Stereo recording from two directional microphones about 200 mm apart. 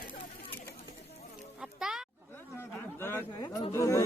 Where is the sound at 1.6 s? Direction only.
5° right (ahead or behind).